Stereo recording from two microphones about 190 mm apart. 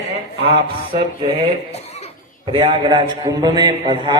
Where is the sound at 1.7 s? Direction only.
35° left (ahead or behind).